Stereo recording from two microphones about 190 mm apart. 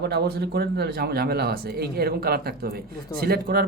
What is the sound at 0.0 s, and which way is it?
Speech, 60° right (ahead or behind).